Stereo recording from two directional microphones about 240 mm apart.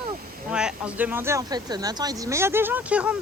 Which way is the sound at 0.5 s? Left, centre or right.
Centre.